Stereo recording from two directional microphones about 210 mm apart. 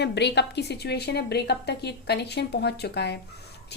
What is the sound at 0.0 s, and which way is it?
A woman's voice, 55° left (ahead or behind).